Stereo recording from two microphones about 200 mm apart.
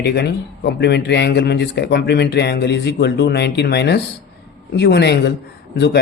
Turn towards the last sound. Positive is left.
turn(degrees=60)  # may be behind; listen again after turning